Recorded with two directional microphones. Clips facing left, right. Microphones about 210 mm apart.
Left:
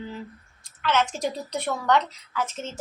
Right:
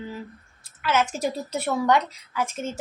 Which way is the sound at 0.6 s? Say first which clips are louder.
Right 1 dB; 10° right (ahead or behind).